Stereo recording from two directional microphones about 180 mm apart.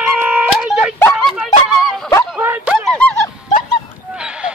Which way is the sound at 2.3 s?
10° right (ahead or behind).